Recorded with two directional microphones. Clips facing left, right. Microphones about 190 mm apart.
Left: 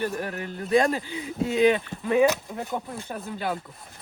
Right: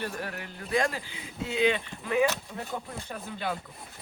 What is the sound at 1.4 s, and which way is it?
Speech, 45° left (ahead or behind).